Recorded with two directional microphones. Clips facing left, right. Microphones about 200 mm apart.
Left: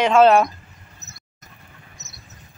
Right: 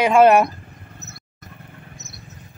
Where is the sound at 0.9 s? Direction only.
60° right (ahead or behind).